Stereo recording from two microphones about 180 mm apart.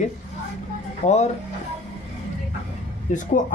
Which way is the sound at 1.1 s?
40° left (ahead or behind).